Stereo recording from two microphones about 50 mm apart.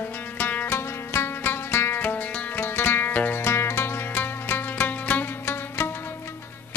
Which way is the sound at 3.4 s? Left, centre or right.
Left.